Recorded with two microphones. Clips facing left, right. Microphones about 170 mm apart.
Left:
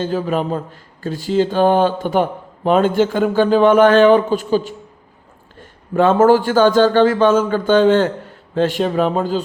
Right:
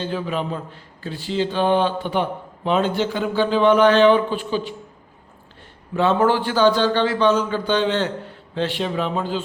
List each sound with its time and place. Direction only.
0.0 s a man's voice: 45° left (ahead or behind)